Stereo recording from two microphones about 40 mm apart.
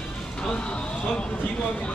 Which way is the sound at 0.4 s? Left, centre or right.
Left.